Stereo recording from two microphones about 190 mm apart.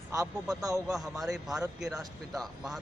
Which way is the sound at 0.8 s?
Centre (ahead or behind).